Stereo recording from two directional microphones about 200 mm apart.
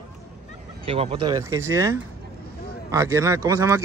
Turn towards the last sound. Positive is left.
turn(degrees=-15)  # may be behind; listen again after turning